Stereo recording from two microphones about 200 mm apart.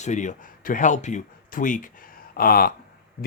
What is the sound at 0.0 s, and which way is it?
Speech, 35° left (ahead or behind).